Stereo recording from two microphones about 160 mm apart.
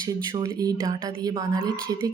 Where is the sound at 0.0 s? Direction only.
25° right (ahead or behind).